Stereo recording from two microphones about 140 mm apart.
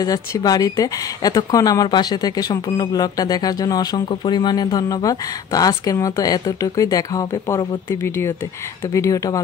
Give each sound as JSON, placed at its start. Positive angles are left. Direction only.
{"t": 0.0, "sound": "speech", "side_deg": 25}